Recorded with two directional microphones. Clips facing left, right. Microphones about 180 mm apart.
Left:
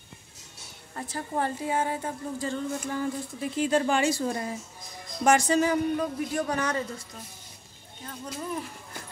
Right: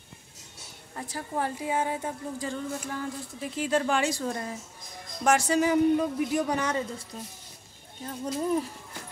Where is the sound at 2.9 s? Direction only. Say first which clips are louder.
Left 4 dB; centre (ahead or behind).